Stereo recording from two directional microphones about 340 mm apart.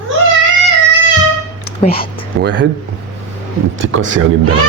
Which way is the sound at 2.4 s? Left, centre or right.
Right.